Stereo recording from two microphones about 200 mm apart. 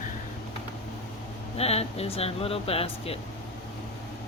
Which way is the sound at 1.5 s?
30° left (ahead or behind).